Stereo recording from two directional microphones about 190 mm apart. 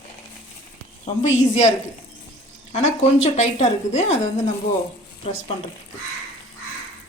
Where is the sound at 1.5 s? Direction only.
35° left (ahead or behind).